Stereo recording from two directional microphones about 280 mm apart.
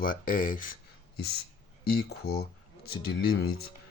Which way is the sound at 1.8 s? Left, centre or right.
Left.